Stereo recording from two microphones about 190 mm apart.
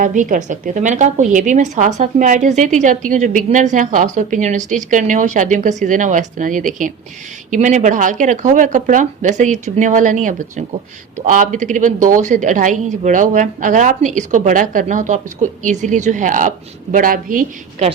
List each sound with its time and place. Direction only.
0.0 s a woman's voice: 45° right (ahead or behind)